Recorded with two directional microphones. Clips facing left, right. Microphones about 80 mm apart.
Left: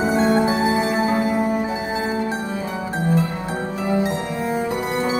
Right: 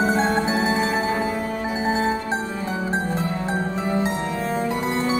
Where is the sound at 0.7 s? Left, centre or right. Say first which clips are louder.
Left 2 dB; left.